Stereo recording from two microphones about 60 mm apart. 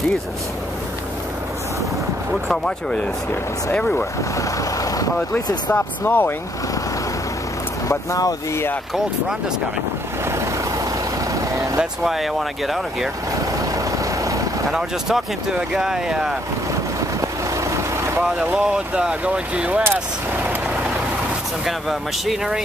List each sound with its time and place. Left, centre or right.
2.4 s speech: centre
3.7 s speech: left
5.3 s speech: left
7.9 s speech: left
11.3 s vehicle: right
11.8 s speech: centre
14.7 s speech: centre
17.2 s vehicle: right
18.4 s speech: centre
19.8 s speech: right
21.6 s speech: centre